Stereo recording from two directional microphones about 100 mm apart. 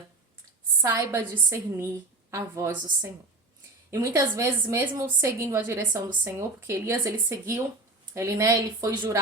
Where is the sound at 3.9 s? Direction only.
30° right (ahead or behind).